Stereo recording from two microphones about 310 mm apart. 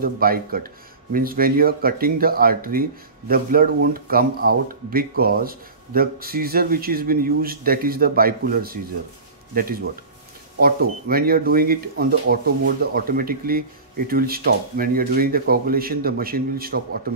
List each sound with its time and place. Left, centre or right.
0.0 s speech: right